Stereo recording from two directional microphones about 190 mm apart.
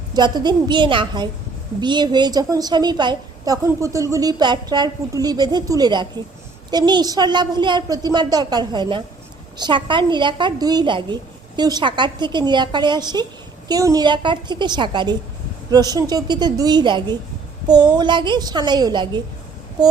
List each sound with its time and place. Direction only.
0.1 s a woman's voice: 20° right (ahead or behind)